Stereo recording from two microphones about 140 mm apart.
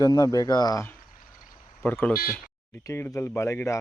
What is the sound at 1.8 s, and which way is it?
Speech, 10° left (ahead or behind).